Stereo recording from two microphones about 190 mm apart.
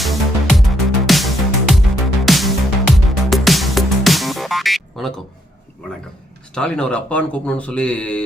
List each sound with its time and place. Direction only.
0.0 s music: centre (ahead or behind)
6.5 s speech: 5° left (ahead or behind)